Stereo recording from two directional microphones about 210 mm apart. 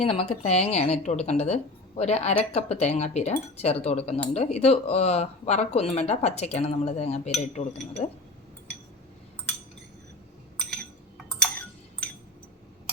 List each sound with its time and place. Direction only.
0.0 s speech: 30° left (ahead or behind)